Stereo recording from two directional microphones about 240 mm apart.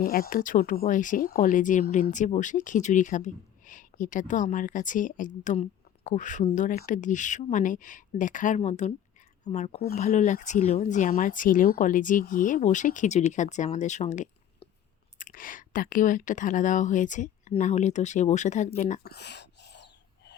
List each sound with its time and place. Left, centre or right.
0.0 s speech: left